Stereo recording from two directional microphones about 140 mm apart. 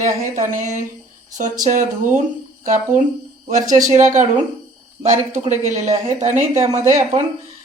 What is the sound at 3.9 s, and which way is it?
Speech, 60° right (ahead or behind).